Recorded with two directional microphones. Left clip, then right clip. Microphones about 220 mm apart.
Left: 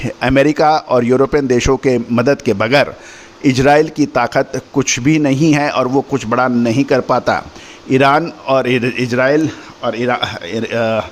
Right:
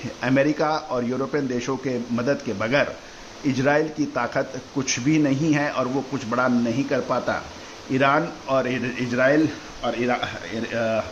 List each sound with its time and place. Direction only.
0.2 s a man's voice: 45° left (ahead or behind)